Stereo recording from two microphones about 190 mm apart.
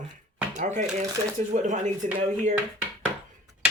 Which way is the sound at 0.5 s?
40° right (ahead or behind).